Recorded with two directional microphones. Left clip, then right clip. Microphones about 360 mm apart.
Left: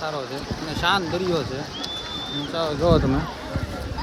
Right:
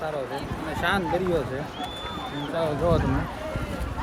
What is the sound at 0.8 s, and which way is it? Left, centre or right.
Speech, centre.